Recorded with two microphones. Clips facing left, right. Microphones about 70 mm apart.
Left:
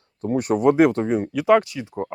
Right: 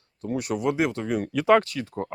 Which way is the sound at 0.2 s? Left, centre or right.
Left.